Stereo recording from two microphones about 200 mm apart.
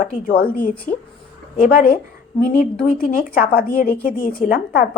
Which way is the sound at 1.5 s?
45° left (ahead or behind).